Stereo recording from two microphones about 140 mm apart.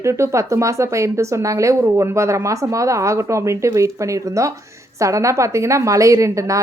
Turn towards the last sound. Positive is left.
turn(degrees=-20)  # may be behind; listen again after turning